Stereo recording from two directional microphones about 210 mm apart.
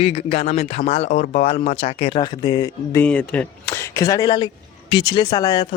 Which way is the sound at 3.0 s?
5° left (ahead or behind).